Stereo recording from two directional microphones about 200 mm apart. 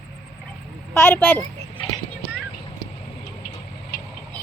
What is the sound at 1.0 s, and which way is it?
Speech, 10° left (ahead or behind).